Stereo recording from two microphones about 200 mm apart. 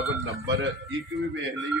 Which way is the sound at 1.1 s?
Centre (ahead or behind).